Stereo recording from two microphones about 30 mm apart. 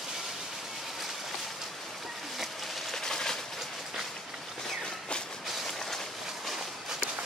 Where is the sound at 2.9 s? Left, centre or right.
Centre.